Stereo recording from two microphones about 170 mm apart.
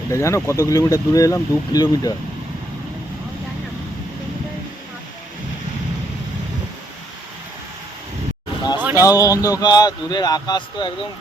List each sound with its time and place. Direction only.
0.1 s speech: 15° left (ahead or behind)
9.0 s speech: 20° left (ahead or behind)